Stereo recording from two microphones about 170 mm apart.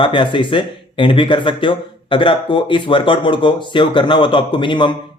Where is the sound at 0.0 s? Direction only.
30° left (ahead or behind).